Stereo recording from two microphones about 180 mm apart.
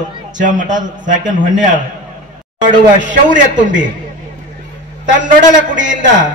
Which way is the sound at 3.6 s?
45° right (ahead or behind).